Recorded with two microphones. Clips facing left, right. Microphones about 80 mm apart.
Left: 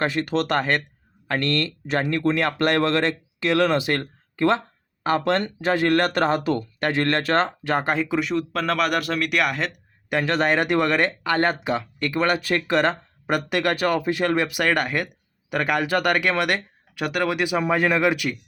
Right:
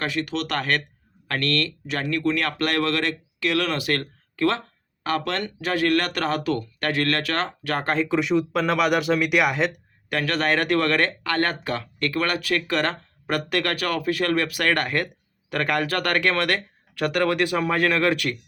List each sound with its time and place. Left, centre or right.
0.0 s speech: left
0.5 s speech: left; by 9.8 s centre
10.1 s speech: centre